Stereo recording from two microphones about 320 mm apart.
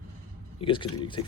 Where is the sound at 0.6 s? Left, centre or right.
Centre.